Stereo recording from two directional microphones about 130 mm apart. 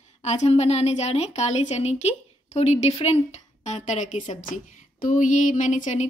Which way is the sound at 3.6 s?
65° left (ahead or behind).